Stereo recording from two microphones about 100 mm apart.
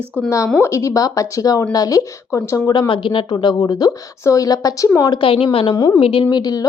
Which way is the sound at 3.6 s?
40° left (ahead or behind).